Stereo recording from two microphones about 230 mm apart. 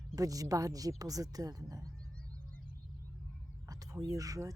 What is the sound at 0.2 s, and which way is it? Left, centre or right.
A woman's voice, centre.